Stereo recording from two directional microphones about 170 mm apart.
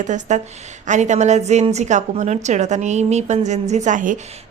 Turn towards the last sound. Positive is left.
turn(degrees=-50)  # may be behind; listen again after turning